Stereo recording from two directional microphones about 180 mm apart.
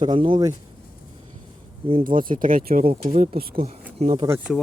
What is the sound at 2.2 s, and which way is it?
Speech, 50° right (ahead or behind).